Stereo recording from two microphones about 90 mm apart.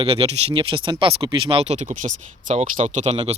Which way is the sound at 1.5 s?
90° right.